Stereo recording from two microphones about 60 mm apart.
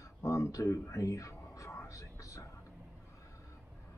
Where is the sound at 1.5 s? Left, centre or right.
Left.